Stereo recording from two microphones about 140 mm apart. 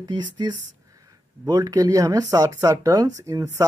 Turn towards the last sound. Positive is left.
turn(degrees=-20)  # may be behind; listen again after turning